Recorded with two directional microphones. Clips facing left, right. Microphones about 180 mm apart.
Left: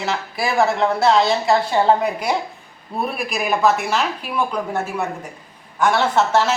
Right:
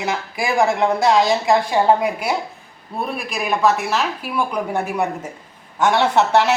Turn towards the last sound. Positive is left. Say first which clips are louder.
# right 2 dB
turn(degrees=-20)  # may be behind; listen again after turning